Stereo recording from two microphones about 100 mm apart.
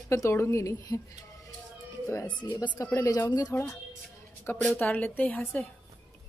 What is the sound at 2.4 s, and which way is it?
Speech, 45° left (ahead or behind).